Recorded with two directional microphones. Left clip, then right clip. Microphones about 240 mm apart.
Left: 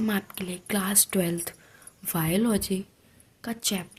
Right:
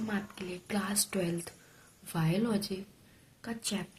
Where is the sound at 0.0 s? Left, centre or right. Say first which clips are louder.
Left 7 dB; left.